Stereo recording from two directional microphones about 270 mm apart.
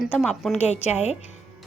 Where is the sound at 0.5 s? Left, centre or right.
Left.